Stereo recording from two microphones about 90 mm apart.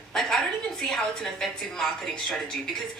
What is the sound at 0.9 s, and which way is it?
Speech, 5° left (ahead or behind).